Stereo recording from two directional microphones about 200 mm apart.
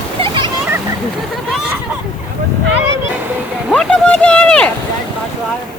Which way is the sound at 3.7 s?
5° left (ahead or behind).